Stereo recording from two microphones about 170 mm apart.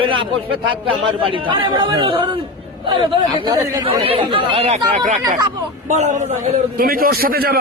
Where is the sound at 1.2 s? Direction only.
30° right (ahead or behind); by 6.6 s 45° right (ahead or behind).